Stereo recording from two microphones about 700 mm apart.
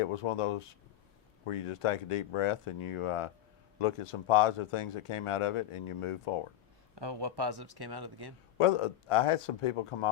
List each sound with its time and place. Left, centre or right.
0.0 s speech: left
6.9 s speech: right
8.5 s speech: left